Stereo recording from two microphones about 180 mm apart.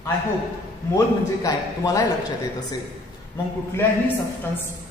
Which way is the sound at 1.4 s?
20° left (ahead or behind).